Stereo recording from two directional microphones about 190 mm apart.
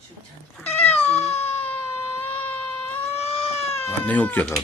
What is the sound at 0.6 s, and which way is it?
Cat, 35° left (ahead or behind).